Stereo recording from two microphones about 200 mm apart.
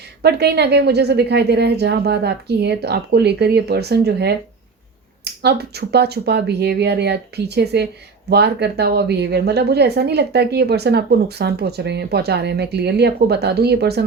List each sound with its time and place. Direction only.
0.2 s a woman's voice: 55° right (ahead or behind)